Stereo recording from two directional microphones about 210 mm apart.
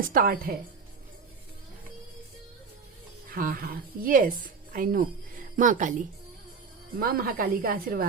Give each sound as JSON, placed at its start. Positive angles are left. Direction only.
{"t": 0.1, "sound": "a woman's voice", "side_deg": -40}
{"t": 3.2, "sound": "a woman's voice", "side_deg": -45}
{"t": 7.0, "sound": "a woman's voice", "side_deg": -45}